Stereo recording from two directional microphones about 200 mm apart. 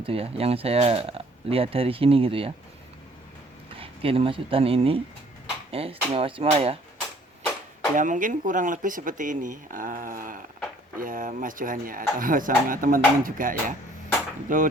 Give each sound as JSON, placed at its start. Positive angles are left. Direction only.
{"t": 0.0, "sound": "speech", "side_deg": -30}
{"t": 3.8, "sound": "speech", "side_deg": -30}
{"t": 7.9, "sound": "speech", "side_deg": -40}